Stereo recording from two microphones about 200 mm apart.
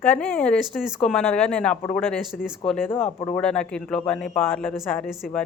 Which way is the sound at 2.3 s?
5° right (ahead or behind).